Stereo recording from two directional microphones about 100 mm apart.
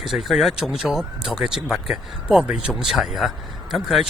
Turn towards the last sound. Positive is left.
turn(degrees=0)  # may be behind; listen again after turning